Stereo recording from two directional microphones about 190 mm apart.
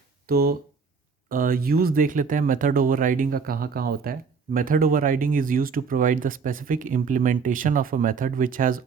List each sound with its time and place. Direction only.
0.3 s speech: 50° right (ahead or behind)